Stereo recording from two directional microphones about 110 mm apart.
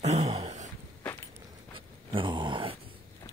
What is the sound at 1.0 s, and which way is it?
Walk, 25° left (ahead or behind).